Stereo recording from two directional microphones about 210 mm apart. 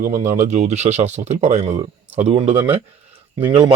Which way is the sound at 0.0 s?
35° right (ahead or behind).